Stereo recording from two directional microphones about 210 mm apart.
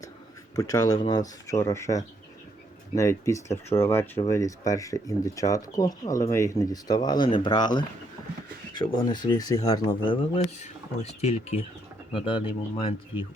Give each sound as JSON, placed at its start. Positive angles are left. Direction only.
{"t": 0.5, "sound": "speech", "side_deg": 15}